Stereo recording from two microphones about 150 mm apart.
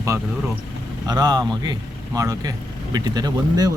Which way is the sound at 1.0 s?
25° right (ahead or behind).